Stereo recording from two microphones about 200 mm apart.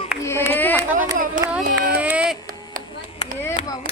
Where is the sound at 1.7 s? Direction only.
50° right (ahead or behind).